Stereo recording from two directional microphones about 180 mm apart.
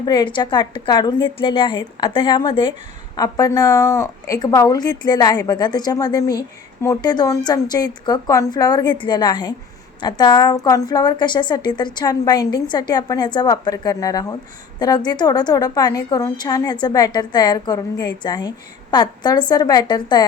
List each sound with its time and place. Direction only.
0.0 s a woman's voice: 25° left (ahead or behind)